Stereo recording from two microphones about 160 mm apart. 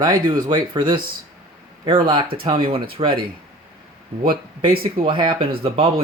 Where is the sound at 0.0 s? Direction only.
25° right (ahead or behind).